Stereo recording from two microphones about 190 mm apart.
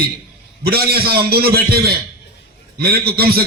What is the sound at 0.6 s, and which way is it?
A man's voice, 55° right (ahead or behind).